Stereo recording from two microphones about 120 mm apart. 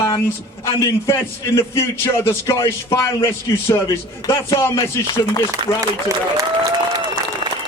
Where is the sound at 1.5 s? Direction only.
25° left (ahead or behind).